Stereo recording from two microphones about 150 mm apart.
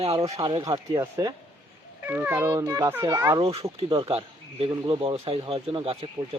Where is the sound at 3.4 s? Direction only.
40° right (ahead or behind).